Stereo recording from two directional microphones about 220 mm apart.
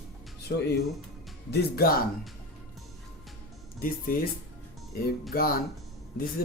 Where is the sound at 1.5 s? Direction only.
45° left (ahead or behind).